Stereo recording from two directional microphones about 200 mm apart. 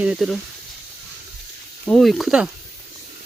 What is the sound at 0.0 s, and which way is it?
Speech, 5° right (ahead or behind).